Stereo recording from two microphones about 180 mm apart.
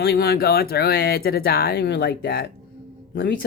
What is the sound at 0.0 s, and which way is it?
Speech, 60° left (ahead or behind).